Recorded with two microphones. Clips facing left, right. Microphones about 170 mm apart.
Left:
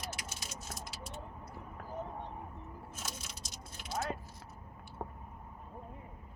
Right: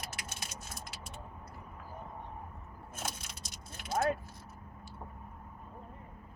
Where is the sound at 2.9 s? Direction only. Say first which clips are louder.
Right 6 dB; 55° right (ahead or behind).